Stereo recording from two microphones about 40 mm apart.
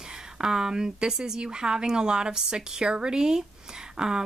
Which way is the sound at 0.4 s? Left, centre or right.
Centre.